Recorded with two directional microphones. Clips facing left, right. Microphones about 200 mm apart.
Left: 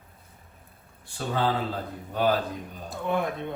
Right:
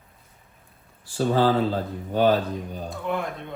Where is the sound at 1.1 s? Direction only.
35° right (ahead or behind).